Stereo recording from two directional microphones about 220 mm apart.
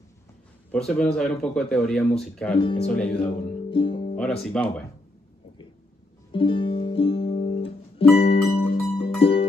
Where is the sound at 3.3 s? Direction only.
25° left (ahead or behind).